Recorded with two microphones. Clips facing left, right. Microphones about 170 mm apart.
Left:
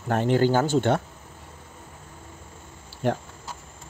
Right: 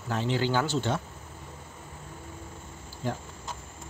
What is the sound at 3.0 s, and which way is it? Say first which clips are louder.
Speech: left 8 dB; 70° left (ahead or behind).